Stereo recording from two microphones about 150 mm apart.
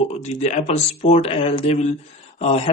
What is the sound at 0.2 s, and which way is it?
Speech, 45° left (ahead or behind).